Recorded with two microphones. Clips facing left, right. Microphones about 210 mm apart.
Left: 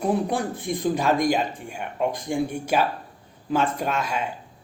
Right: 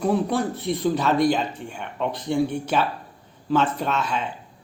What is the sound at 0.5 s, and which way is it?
Speech, 50° left (ahead or behind).